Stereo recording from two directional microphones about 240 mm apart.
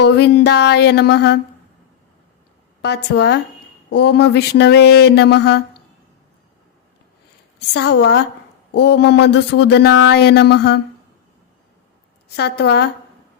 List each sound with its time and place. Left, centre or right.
0.0 s speech: left
2.8 s speech: left
7.7 s speech: left
12.4 s speech: left